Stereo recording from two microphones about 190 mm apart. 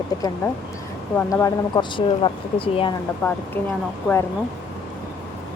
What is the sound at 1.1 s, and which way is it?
Speech, 15° left (ahead or behind).